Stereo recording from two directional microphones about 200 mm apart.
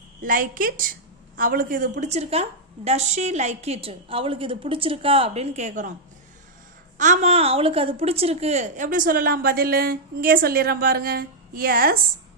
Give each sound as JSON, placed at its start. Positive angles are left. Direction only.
{"t": 0.2, "sound": "a woman's voice", "side_deg": -45}
{"t": 6.9, "sound": "a woman's voice", "side_deg": -40}